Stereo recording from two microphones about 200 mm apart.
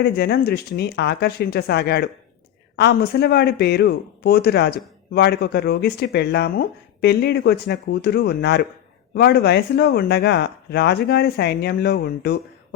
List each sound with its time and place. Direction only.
0.0 s speech: 50° left (ahead or behind)